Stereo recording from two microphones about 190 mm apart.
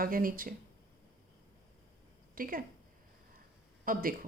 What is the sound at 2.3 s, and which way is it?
Speech, 50° right (ahead or behind).